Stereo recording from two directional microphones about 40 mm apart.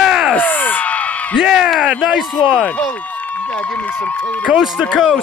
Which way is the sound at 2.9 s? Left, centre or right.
Left.